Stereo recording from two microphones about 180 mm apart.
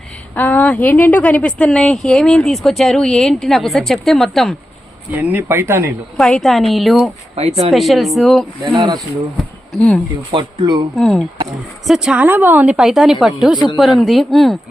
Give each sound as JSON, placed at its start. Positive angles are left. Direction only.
{"t": 0.3, "sound": "speech", "side_deg": 10}
{"t": 6.1, "sound": "speech", "side_deg": 5}
{"t": 7.3, "sound": "speech", "side_deg": -35}
{"t": 7.7, "sound": "speech", "side_deg": 0}
{"t": 8.6, "sound": "speech", "side_deg": -20}
{"t": 9.4, "sound": "a sound", "side_deg": 5}
{"t": 10.3, "sound": "speech", "side_deg": -25}
{"t": 10.9, "sound": "speech", "side_deg": 0}